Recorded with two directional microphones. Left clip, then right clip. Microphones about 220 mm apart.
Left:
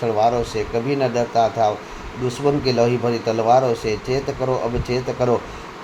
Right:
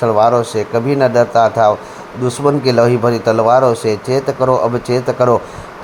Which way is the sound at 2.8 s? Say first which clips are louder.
Right 7 dB; 20° right (ahead or behind).